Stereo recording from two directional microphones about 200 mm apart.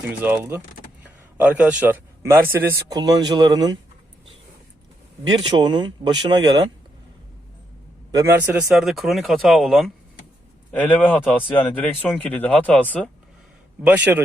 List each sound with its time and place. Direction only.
0.1 s a man's voice: 10° right (ahead or behind)
5.3 s a man's voice: 20° right (ahead or behind)
8.1 s a man's voice: 10° right (ahead or behind)
8.7 s speech: centre (ahead or behind)
13.9 s a man's voice: 10° right (ahead or behind)